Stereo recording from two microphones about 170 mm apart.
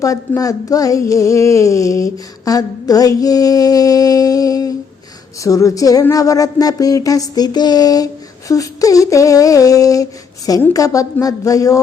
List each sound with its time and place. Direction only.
0.0 s speech: 20° left (ahead or behind)